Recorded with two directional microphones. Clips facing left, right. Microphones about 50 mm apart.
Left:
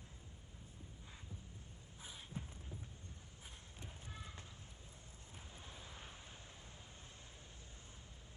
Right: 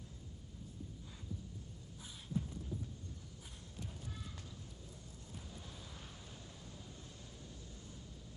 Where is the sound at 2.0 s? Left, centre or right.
Left.